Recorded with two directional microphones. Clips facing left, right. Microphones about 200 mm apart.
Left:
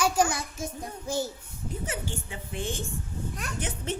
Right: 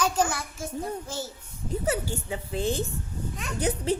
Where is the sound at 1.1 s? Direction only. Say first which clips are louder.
Left 5 dB; 15° left (ahead or behind).